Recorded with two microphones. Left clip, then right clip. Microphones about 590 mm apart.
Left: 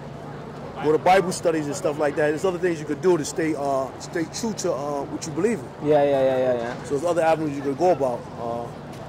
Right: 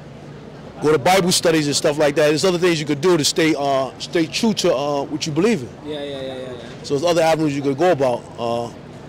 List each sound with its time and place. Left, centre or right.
1.0 s a man's voice: right
5.9 s a man's voice: left
6.9 s a man's voice: right